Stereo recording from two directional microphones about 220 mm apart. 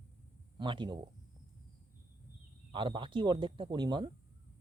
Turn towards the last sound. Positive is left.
turn(degrees=-20)  # may be behind; listen again after turning